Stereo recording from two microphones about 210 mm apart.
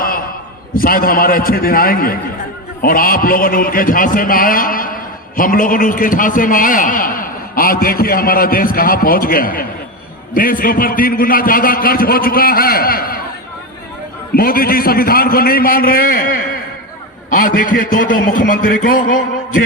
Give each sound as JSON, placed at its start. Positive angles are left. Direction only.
{"t": 0.8, "sound": "a man's voice", "side_deg": 45}
{"t": 14.3, "sound": "a man's voice", "side_deg": 45}